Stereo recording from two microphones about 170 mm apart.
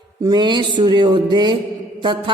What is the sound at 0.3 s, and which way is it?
A man's voice, 25° right (ahead or behind).